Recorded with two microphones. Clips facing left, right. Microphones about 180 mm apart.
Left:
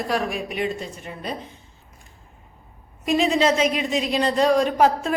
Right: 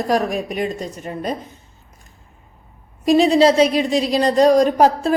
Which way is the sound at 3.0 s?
35° right (ahead or behind).